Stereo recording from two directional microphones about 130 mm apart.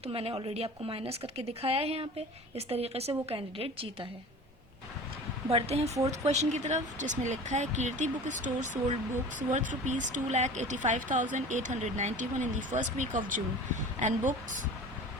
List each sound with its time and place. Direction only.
0.0 s speech: 45° right (ahead or behind)
5.5 s speech: 50° right (ahead or behind); by 13.4 s 90° right
14.0 s speech: 75° right (ahead or behind)